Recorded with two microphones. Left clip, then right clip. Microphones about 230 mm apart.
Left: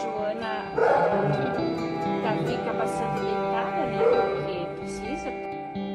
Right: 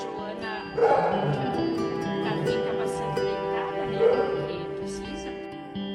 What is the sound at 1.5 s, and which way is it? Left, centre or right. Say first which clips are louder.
Music: even; right.